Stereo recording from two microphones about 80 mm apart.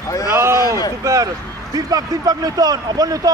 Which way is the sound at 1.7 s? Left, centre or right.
Right.